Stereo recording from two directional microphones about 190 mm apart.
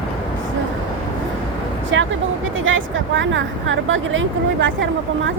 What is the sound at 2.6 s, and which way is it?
Speech, 90° right.